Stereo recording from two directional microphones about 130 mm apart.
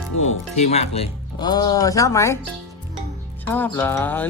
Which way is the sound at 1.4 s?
30° left (ahead or behind).